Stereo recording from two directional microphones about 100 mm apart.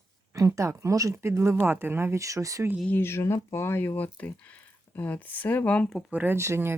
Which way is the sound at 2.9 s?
25° left (ahead or behind).